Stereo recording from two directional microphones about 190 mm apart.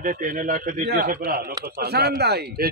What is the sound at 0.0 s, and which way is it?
Speech, 50° right (ahead or behind).